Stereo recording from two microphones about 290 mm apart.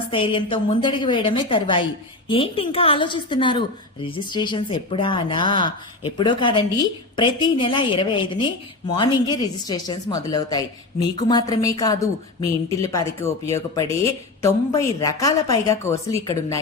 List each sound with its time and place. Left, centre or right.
0.1 s a woman's voice: centre